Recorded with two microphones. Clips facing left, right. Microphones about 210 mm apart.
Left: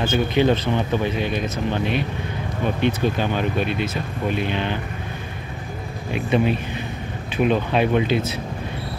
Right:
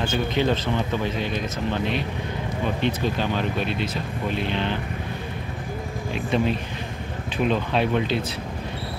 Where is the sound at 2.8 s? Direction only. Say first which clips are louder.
Left 4 dB; 55° left (ahead or behind).